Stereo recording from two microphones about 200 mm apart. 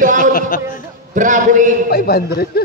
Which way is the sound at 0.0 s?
40° right (ahead or behind).